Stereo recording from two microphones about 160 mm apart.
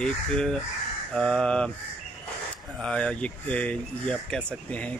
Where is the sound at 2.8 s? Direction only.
5° left (ahead or behind).